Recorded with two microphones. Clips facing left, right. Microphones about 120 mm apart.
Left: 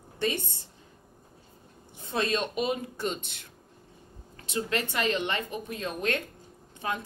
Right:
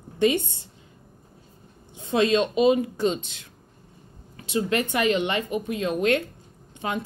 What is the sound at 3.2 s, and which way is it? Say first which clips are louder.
Speech: right 2 dB; 55° left (ahead or behind).